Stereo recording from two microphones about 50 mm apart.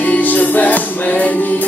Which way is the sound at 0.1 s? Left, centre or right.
Left.